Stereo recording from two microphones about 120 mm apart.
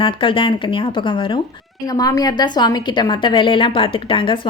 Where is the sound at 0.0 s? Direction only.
45° left (ahead or behind).